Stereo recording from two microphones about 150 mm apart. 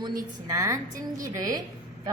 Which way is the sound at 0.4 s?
20° right (ahead or behind).